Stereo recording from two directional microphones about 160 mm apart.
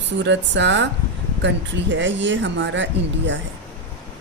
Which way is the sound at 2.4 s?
90° right.